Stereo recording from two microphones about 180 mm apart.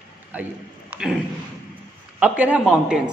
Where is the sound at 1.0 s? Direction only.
5° right (ahead or behind).